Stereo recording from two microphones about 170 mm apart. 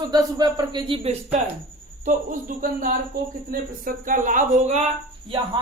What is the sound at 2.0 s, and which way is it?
Speech, 50° right (ahead or behind).